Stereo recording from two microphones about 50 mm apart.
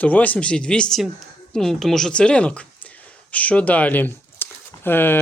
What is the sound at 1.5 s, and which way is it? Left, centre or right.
Speech, centre.